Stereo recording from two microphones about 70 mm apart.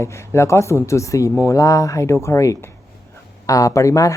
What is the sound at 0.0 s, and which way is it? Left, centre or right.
Speech, left.